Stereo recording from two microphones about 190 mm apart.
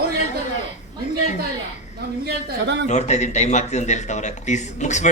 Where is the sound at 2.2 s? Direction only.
65° right (ahead or behind).